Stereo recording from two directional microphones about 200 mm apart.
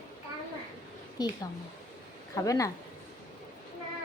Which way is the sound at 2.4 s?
15° left (ahead or behind).